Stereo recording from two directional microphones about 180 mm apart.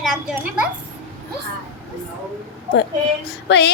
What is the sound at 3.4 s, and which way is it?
Speech, 75° left (ahead or behind).